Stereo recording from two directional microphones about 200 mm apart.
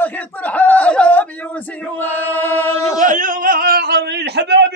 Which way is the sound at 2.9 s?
40° right (ahead or behind).